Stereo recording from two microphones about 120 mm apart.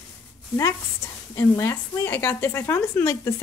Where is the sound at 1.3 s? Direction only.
25° left (ahead or behind).